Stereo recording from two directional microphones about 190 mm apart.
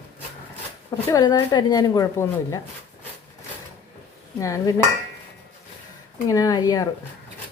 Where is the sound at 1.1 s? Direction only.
20° left (ahead or behind).